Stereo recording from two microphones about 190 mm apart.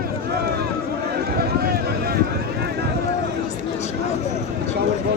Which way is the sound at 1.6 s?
55° right (ahead or behind).